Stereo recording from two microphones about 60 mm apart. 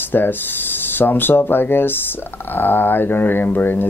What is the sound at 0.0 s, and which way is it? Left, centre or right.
Speech, left.